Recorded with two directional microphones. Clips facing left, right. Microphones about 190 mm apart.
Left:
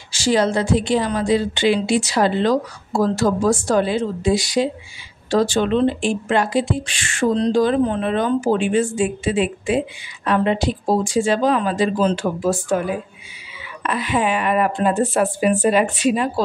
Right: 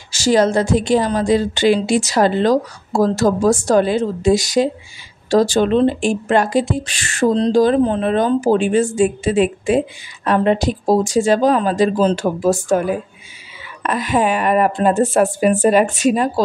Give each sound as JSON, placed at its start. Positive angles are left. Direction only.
{"t": 0.1, "sound": "speech", "side_deg": -45}
{"t": 13.8, "sound": "speech", "side_deg": -45}